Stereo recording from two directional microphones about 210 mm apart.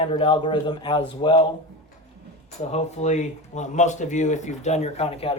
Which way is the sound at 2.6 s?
35° left (ahead or behind).